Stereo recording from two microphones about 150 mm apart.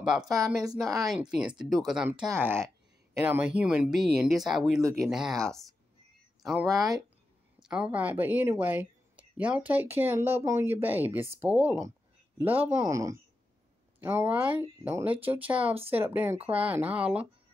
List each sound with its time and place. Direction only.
0.2 s speech: 25° right (ahead or behind)
0.8 s speech: centre (ahead or behind)
2.4 s speech: 15° right (ahead or behind)
6.7 s speech: 25° right (ahead or behind)
7.6 s speech: 5° right (ahead or behind)